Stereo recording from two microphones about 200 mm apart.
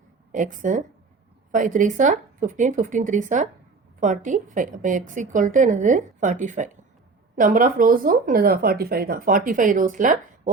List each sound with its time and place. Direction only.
0.3 s a woman's voice: 40° right (ahead or behind)